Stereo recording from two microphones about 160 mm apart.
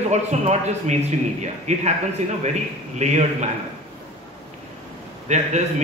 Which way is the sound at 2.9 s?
45° right (ahead or behind).